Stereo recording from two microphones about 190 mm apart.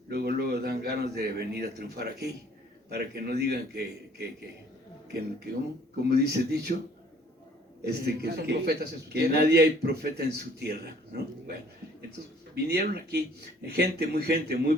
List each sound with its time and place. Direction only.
0.1 s a man's voice: 60° right (ahead or behind)
6.1 s a man's voice: 60° right (ahead or behind)
7.9 s a man's voice: 60° right (ahead or behind)
12.6 s a man's voice: 60° right (ahead or behind)